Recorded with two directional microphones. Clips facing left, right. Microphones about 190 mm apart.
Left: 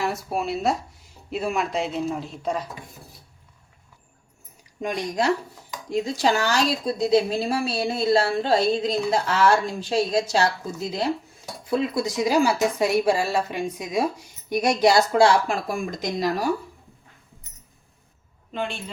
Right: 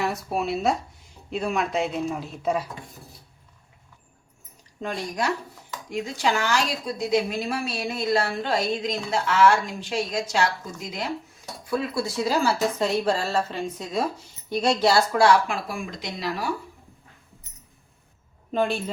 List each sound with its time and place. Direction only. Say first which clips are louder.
0.0 s a man's voice: even; centre (ahead or behind)
4.8 s speech: left 3 dB; 15° left (ahead or behind)
5.9 s speech: left 3 dB; 35° left (ahead or behind)
11.7 s speech: left 3 dB; 20° left (ahead or behind)
15.4 s speech: left 4 dB; 45° left (ahead or behind)
18.5 s a woman's voice: right 6 dB; 40° right (ahead or behind)